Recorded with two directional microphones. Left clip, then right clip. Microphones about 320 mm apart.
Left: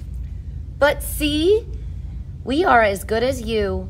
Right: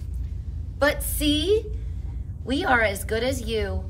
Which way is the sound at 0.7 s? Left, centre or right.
Centre.